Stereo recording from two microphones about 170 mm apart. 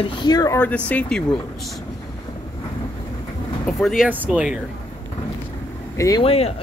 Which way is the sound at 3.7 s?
Centre (ahead or behind).